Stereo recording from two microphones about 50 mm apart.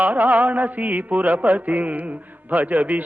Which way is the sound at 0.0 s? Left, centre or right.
Right.